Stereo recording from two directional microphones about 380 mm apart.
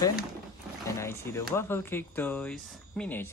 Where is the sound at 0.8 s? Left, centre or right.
Centre.